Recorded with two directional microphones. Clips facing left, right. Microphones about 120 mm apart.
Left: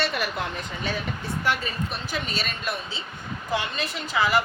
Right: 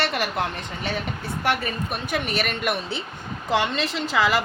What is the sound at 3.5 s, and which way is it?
Speech, 90° right.